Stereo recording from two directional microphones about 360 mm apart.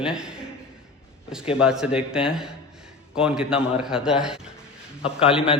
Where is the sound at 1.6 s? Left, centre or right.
Centre.